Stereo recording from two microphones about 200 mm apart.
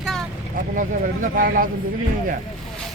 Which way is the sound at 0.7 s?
40° right (ahead or behind).